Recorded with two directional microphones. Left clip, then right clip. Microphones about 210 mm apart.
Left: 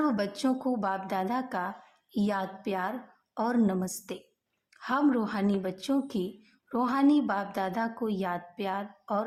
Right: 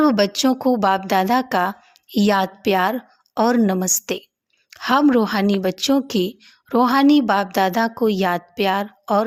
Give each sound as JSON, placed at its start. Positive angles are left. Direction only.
{"t": 0.0, "sound": "a woman's voice", "side_deg": -35}